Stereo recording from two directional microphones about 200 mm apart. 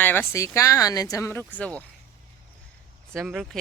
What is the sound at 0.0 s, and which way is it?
Speech, 10° left (ahead or behind).